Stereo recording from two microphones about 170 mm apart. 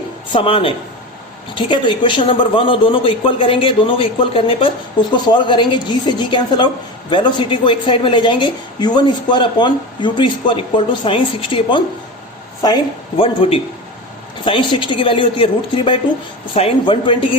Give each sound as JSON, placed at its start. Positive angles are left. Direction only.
{"t": 0.3, "sound": "a man's voice", "side_deg": 30}